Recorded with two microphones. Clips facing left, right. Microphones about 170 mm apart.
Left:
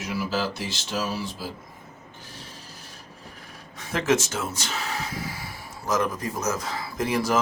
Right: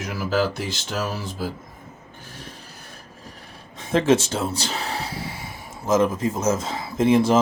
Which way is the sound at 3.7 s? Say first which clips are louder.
Right 5 dB; 30° right (ahead or behind).